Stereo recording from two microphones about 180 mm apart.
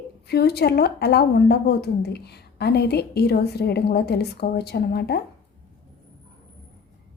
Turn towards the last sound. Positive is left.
turn(degrees=60)  # may be behind; listen again after turning